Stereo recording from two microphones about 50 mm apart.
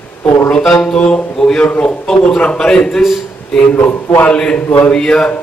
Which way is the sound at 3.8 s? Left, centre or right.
Left.